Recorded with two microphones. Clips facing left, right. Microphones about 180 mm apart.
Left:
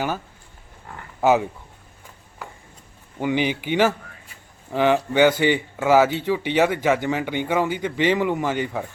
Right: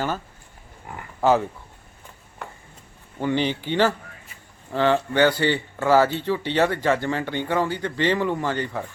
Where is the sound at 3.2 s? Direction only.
10° left (ahead or behind).